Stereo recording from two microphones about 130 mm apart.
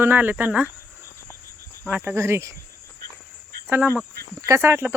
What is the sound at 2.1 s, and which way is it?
Speech, 20° right (ahead or behind).